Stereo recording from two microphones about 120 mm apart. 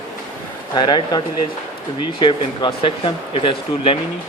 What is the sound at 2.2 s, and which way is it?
Speech, 40° left (ahead or behind).